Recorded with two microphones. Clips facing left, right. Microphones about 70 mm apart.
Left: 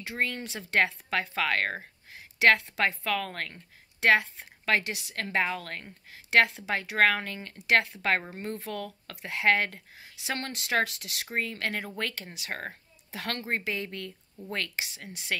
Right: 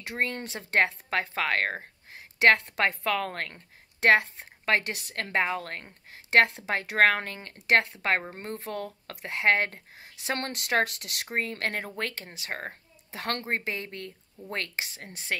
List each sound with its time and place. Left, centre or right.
0.2 s speech: right
2.1 s a woman's voice: right
12.0 s speech: right
12.5 s a sound: right
13.2 s a woman's voice: right